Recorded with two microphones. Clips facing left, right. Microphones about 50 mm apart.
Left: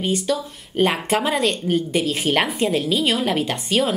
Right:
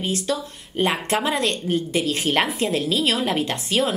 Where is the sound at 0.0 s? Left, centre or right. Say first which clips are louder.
Left 3 dB; centre.